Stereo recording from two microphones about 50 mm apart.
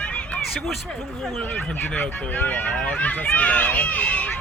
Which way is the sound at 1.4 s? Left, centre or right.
Left.